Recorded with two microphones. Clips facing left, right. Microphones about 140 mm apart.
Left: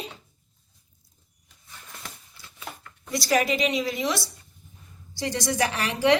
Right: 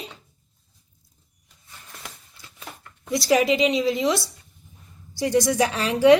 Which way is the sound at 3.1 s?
20° right (ahead or behind).